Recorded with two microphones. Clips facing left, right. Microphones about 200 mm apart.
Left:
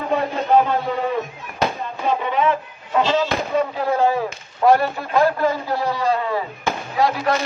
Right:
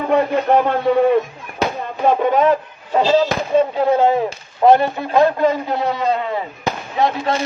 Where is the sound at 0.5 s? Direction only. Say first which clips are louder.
Even; 65° right (ahead or behind).